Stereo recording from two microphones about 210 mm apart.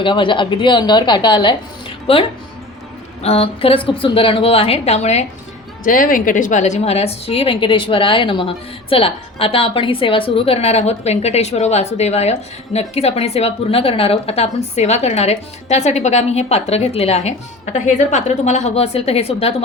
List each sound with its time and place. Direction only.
0.0 s a woman's voice: 25° left (ahead or behind)
3.2 s a woman's voice: 30° left (ahead or behind)